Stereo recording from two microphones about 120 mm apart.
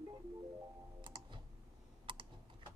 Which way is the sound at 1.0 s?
40° right (ahead or behind).